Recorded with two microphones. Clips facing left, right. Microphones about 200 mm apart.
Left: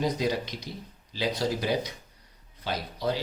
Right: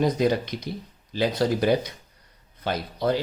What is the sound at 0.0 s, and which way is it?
Speech, 55° right (ahead or behind).